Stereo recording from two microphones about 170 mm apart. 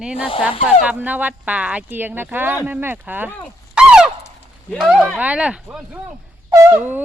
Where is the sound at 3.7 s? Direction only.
5° right (ahead or behind).